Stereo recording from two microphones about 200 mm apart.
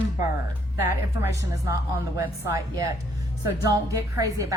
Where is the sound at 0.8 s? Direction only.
10° right (ahead or behind).